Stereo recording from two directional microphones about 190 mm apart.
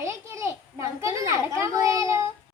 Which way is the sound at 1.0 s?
15° right (ahead or behind).